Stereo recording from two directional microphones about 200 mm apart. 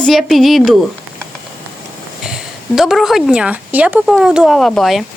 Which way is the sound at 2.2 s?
5° right (ahead or behind).